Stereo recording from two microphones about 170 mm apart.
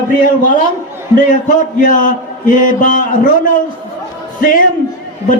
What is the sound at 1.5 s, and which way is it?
A man's voice, 50° left (ahead or behind).